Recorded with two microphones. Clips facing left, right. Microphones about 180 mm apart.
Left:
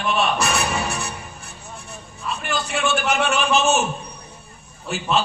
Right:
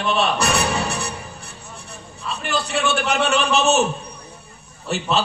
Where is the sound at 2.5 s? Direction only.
35° right (ahead or behind).